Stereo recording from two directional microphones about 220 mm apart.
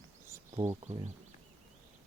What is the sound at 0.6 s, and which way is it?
Speech, 30° right (ahead or behind).